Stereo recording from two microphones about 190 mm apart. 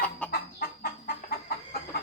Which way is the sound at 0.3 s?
55° left (ahead or behind).